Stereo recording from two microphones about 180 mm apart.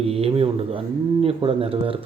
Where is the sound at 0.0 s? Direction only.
35° right (ahead or behind).